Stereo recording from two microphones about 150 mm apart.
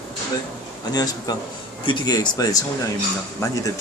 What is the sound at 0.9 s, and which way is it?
Speech, 25° left (ahead or behind).